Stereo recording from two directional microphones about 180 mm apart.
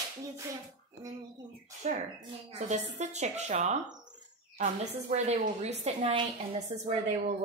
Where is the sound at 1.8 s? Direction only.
40° right (ahead or behind).